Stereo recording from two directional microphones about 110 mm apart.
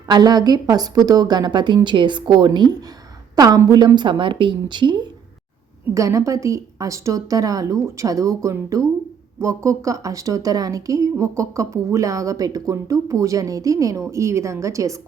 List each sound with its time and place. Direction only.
0.1 s a woman's voice: 40° right (ahead or behind)
5.9 s speech: 30° right (ahead or behind)